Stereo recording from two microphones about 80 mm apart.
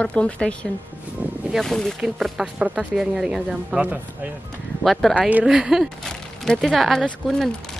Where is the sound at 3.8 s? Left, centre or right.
Centre.